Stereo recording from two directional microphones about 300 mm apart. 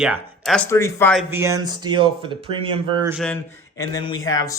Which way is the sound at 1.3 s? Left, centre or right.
Centre.